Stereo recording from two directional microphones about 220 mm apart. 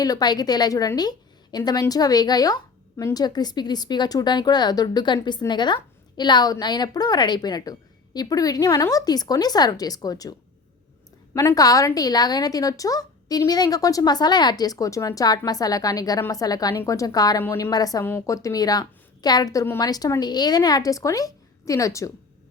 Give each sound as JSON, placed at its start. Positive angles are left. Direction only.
{"t": 0.0, "sound": "speech", "side_deg": 15}
{"t": 11.3, "sound": "speech", "side_deg": 15}